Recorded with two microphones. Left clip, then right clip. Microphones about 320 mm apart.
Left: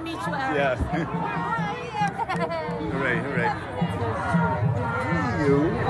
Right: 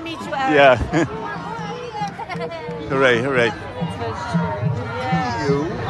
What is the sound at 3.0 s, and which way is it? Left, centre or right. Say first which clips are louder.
Speech: right 10 dB; centre.